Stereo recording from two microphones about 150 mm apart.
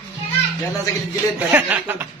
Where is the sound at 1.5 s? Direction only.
10° right (ahead or behind).